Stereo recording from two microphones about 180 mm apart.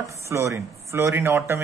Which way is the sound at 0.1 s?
15° right (ahead or behind).